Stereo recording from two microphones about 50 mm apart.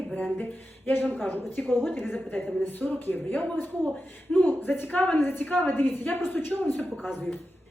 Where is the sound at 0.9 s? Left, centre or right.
Left.